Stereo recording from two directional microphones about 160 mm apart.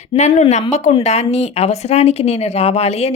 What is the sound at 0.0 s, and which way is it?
Speech, 45° left (ahead or behind).